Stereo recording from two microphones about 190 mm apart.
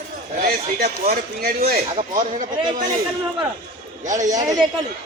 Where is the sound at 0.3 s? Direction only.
50° right (ahead or behind).